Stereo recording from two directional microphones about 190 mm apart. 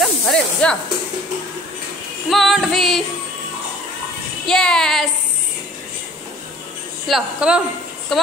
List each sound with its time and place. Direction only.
0.0 s snake: 5° left (ahead or behind)
2.2 s female singing: centre (ahead or behind)
4.5 s female singing: 5° left (ahead or behind)
7.1 s female singing: 5° right (ahead or behind)